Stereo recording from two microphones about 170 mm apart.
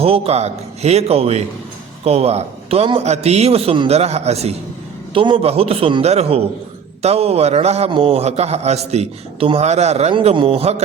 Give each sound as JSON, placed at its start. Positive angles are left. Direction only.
{"t": 0.0, "sound": "a man's voice", "side_deg": -35}